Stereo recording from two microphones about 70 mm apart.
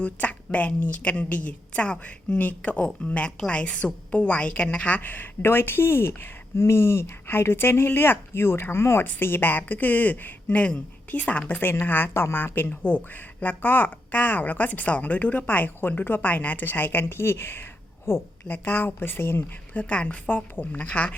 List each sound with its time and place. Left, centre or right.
0.0 s a woman's voice: left
11.6 s a woman's voice: left
19.7 s a woman's voice: centre